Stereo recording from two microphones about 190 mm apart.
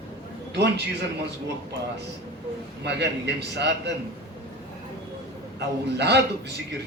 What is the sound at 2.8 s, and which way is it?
A man's voice, 60° right (ahead or behind).